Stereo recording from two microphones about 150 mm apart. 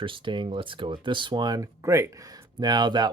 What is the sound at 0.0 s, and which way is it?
Speech, 35° right (ahead or behind).